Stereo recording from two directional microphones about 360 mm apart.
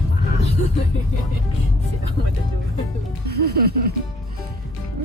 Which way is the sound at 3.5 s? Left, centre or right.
Right.